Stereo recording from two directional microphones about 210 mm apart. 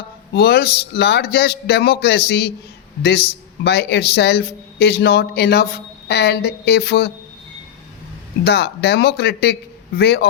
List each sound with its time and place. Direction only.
0.3 s speech: 50° left (ahead or behind)
8.4 s speech: 50° left (ahead or behind)